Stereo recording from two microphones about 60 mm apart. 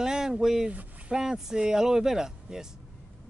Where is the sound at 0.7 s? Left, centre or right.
Right.